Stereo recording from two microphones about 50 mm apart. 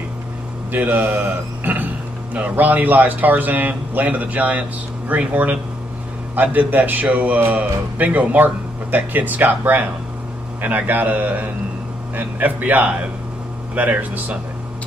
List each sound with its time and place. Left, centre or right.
0.7 s a man's voice: right
1.2 s a sound: right
2.3 s speech: right
10.9 s speech: right